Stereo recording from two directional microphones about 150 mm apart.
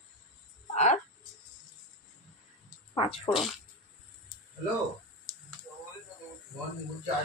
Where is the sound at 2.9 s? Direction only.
40° left (ahead or behind).